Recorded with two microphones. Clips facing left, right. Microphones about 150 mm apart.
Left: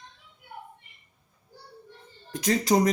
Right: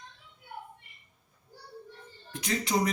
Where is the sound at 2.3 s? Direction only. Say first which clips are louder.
Left 7 dB; 40° left (ahead or behind).